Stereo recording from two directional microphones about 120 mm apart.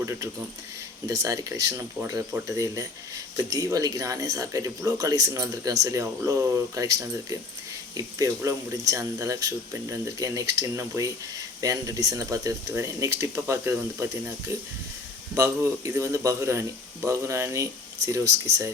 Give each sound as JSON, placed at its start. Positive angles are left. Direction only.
{"t": 0.0, "sound": "a man's voice", "side_deg": -25}